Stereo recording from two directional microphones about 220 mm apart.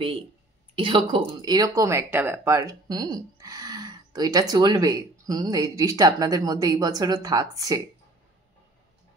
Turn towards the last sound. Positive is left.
turn(degrees=-15)  # may be behind; listen again after turning